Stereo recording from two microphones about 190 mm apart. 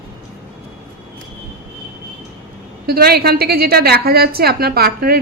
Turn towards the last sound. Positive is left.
turn(degrees=-55)  # may be behind; listen again after turning